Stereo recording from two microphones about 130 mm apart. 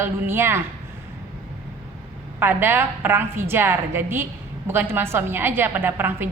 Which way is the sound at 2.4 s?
15° right (ahead or behind).